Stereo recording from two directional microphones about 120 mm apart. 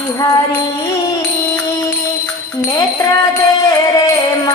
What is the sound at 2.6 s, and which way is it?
Speech, 25° left (ahead or behind).